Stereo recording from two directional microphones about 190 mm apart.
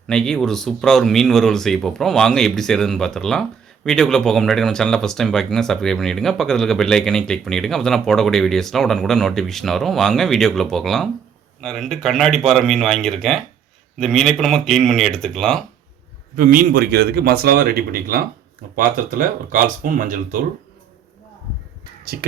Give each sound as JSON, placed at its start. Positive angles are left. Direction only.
{"t": 0.1, "sound": "speech", "side_deg": 5}
{"t": 16.3, "sound": "speech", "side_deg": -45}